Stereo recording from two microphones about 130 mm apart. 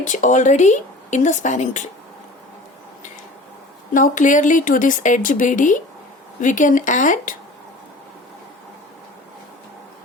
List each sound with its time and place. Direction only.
0.0 s speech: 75° left (ahead or behind)
3.9 s a woman's voice: 85° left